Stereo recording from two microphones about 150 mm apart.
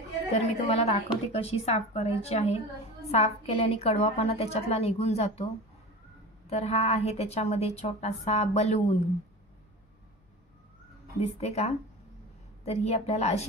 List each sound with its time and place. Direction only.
0.3 s a woman's voice: 45° left (ahead or behind)
11.1 s a woman's voice: 45° left (ahead or behind)